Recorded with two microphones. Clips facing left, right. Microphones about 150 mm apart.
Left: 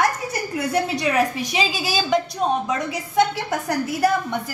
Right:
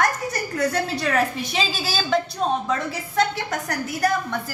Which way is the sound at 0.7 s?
15° left (ahead or behind).